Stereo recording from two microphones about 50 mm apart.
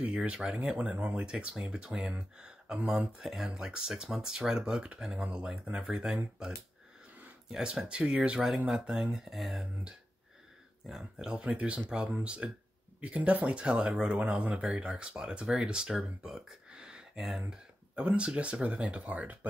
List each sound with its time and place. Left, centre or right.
0.1 s speech: centre
3.2 s speech: centre
7.5 s speech: centre
10.9 s speech: centre
16.7 s a sound: centre
17.5 s speech: right